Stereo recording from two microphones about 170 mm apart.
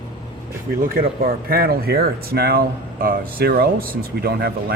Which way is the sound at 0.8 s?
60° right (ahead or behind).